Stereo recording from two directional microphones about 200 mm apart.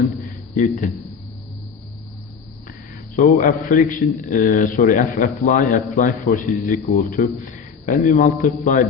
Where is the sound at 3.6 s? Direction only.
40° left (ahead or behind).